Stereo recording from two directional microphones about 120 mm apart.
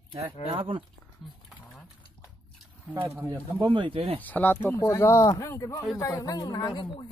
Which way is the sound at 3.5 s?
45° right (ahead or behind).